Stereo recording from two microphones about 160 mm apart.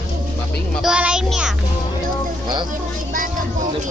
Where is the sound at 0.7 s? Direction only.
5° right (ahead or behind).